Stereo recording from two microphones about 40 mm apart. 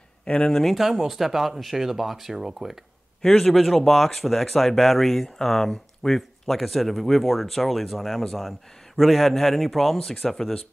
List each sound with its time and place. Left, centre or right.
0.2 s speech: left
0.5 s speech: centre
0.7 s speech: centre
3.2 s a man's voice: centre
3.5 s speech: centre